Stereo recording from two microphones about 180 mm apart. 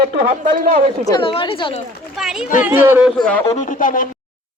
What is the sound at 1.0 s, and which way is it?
Speech, 25° left (ahead or behind).